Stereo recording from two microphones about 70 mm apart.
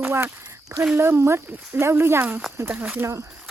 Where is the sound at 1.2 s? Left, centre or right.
Right.